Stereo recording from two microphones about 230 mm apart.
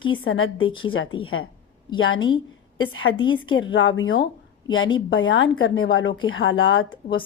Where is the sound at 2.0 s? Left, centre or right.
Left.